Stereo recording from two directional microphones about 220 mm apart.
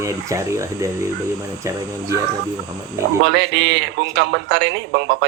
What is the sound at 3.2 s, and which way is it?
A man's voice, 50° right (ahead or behind).